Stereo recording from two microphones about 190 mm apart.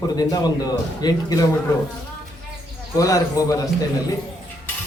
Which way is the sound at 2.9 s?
20° left (ahead or behind).